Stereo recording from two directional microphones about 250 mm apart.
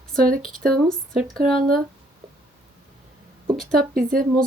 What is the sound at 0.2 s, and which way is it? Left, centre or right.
Speech, right.